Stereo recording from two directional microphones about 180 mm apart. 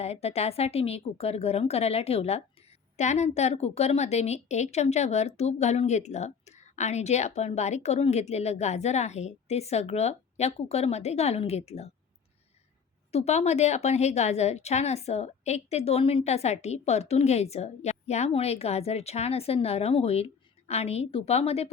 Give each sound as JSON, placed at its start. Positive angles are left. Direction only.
{"t": 0.0, "sound": "a woman's voice", "side_deg": 35}
{"t": 13.1, "sound": "a woman's voice", "side_deg": 35}